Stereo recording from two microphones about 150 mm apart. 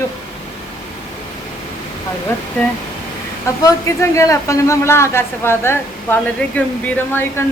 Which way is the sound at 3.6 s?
20° left (ahead or behind).